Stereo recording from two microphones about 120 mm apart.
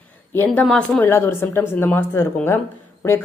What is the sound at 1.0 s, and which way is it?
A woman's voice, 20° left (ahead or behind).